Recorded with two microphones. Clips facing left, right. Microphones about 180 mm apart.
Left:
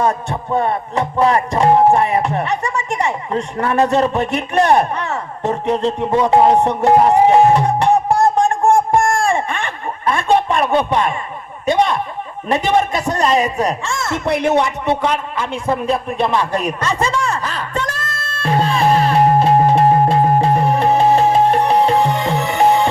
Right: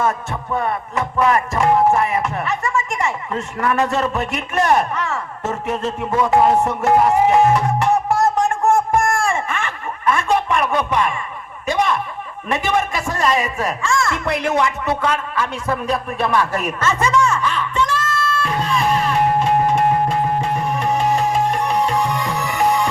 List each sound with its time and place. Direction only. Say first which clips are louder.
0.1 s music: left 4 dB; 25° left (ahead or behind)
8.4 s a sound: left 3 dB; 35° left (ahead or behind)
12.5 s music: left 4 dB; 35° left (ahead or behind)
13.0 s music: left 3 dB; 20° left (ahead or behind)
13.3 s music: left 4 dB; 35° left (ahead or behind)
14.0 s music: left 3 dB; 25° left (ahead or behind)
16.8 s a sound: right 1 dB; 30° left (ahead or behind)
18.3 s music: left 8 dB; 30° left (ahead or behind)